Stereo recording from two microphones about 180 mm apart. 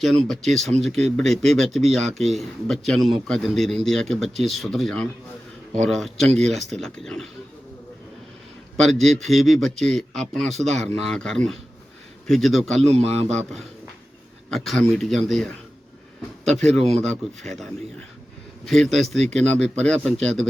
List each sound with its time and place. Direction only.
0.3 s speech: centre (ahead or behind)
8.8 s speech: centre (ahead or behind)
12.9 s a man's voice: 35° right (ahead or behind)
14.5 s speech: centre (ahead or behind)
16.8 s a man's voice: 35° right (ahead or behind)
17.1 s speech: 5° left (ahead or behind)